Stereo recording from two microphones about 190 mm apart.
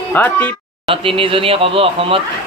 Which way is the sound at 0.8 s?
30° right (ahead or behind).